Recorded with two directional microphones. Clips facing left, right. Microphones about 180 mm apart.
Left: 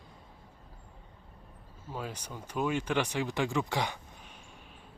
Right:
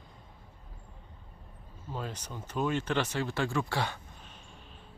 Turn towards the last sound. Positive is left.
turn(degrees=15)  # may be behind; listen again after turning